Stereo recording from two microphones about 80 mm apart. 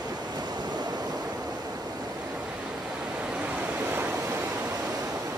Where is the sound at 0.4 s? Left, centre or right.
Right.